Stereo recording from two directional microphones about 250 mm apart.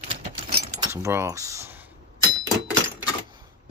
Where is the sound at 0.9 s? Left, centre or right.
Centre.